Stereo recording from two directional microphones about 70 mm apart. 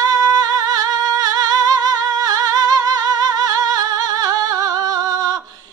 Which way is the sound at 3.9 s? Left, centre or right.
Right.